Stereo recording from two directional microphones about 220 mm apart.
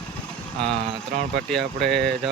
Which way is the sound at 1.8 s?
5° left (ahead or behind).